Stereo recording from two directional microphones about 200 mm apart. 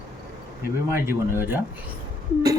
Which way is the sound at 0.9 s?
10° right (ahead or behind).